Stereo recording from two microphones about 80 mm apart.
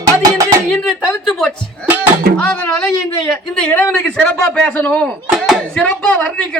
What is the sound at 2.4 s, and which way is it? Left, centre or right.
Speech, centre.